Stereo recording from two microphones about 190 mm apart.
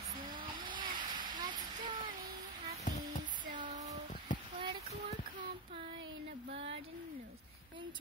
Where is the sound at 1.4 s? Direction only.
25° right (ahead or behind).